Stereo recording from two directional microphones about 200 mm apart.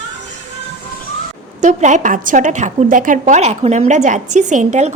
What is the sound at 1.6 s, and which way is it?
A woman's voice, 35° right (ahead or behind).